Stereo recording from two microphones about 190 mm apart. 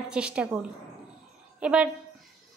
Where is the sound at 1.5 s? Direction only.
5° right (ahead or behind).